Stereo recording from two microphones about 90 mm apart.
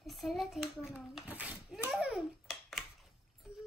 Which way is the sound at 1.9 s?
5° right (ahead or behind).